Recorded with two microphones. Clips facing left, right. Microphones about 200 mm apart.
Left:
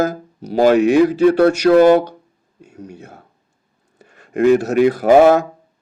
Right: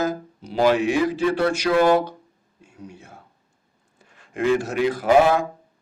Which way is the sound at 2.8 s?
65° left (ahead or behind).